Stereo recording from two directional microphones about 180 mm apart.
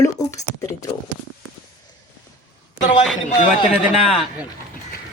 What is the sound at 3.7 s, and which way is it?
Speech, 35° left (ahead or behind).